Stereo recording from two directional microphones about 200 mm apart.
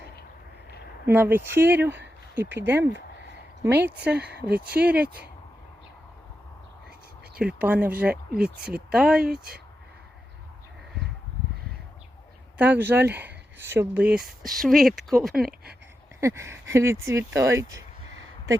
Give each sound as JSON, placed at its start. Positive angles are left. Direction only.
{"t": 1.0, "sound": "speech", "side_deg": -10}
{"t": 4.2, "sound": "speech", "side_deg": -55}
{"t": 4.7, "sound": "speech", "side_deg": -5}
{"t": 7.3, "sound": "speech", "side_deg": -5}
{"t": 12.5, "sound": "speech", "side_deg": -10}
{"t": 16.2, "sound": "speech", "side_deg": -15}